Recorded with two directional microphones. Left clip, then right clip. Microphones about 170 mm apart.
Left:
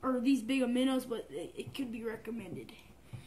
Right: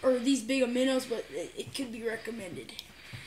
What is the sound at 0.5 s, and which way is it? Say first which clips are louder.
Speech: right 4 dB; centre (ahead or behind).